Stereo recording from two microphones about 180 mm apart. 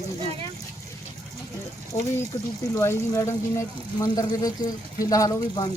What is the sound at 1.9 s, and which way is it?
Speech, 15° left (ahead or behind).